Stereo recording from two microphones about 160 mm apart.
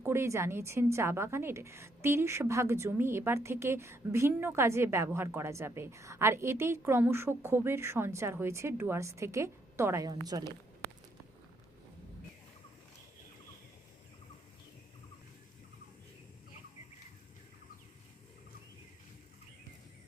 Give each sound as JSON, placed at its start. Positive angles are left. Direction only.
{"t": 0.0, "sound": "a woman's voice", "side_deg": -15}